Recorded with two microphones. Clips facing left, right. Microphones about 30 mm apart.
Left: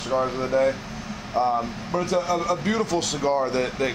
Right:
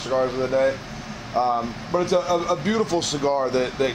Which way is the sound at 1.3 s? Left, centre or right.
Right.